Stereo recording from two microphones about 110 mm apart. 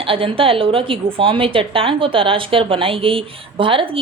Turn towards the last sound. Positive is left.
turn(degrees=-55)  # may be behind; listen again after turning